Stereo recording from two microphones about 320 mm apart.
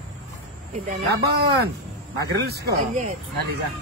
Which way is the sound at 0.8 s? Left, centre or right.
Right.